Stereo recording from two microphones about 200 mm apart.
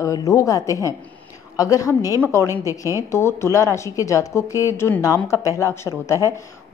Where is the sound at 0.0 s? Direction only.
15° left (ahead or behind).